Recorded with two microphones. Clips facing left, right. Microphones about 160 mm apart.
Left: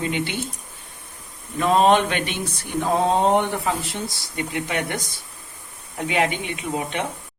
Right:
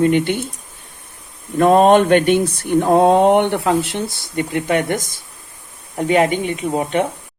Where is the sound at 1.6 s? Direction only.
50° right (ahead or behind).